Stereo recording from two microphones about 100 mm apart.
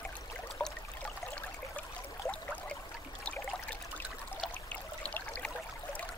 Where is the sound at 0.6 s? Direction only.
15° left (ahead or behind).